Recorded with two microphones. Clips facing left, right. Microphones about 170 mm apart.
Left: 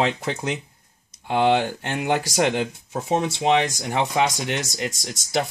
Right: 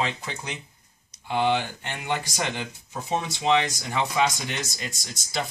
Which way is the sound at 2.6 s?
60° left (ahead or behind).